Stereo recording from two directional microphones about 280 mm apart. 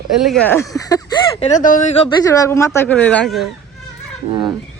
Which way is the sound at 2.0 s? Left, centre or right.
Centre.